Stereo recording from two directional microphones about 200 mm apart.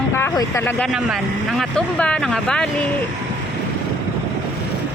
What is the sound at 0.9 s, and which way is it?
Speech, centre (ahead or behind).